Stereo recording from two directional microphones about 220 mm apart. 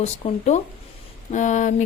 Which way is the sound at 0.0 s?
30° left (ahead or behind).